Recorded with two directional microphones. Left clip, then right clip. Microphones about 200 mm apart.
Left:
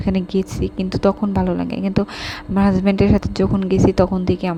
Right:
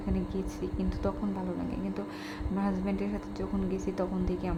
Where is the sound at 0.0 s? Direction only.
40° left (ahead or behind).